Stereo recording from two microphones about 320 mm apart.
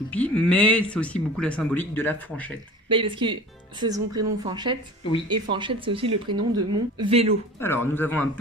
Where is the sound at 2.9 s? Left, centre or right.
Centre.